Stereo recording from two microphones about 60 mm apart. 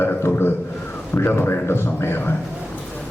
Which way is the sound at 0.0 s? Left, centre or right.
Left.